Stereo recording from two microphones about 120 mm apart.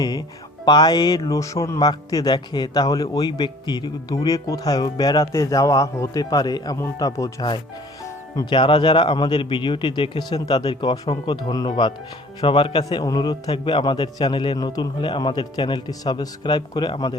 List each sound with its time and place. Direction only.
0.6 s speech: 35° left (ahead or behind)
8.4 s speech: 45° left (ahead or behind)